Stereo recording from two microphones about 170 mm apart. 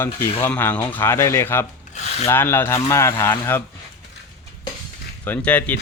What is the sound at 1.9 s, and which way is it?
Rub, 40° left (ahead or behind).